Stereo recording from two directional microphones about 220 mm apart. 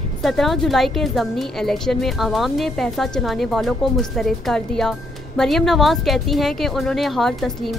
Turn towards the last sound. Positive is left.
turn(degrees=0)  # may be behind; listen again after turning